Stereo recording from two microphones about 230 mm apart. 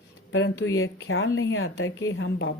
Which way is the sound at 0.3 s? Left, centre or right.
Left.